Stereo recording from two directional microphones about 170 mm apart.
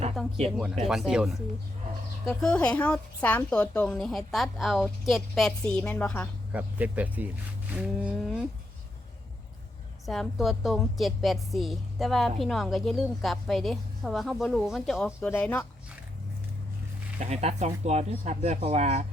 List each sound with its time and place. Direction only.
0.2 s a woman's voice: centre (ahead or behind)
6.5 s speech: 10° right (ahead or behind)
10.1 s a woman's voice: centre (ahead or behind)
17.2 s speech: 40° right (ahead or behind)